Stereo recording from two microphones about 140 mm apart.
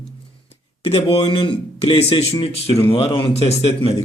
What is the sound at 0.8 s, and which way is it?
A man's voice, 45° left (ahead or behind).